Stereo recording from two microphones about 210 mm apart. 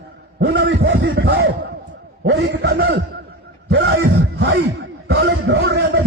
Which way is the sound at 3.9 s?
75° right (ahead or behind).